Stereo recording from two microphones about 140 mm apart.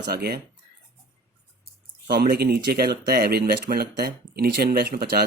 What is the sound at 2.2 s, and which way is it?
Speech, 90° right.